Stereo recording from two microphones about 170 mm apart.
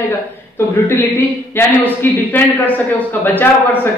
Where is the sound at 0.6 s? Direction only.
10° left (ahead or behind).